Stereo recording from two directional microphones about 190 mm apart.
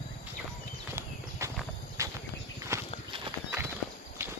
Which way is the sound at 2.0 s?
15° right (ahead or behind).